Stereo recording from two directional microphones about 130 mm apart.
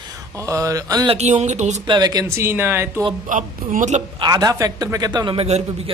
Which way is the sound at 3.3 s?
90° right.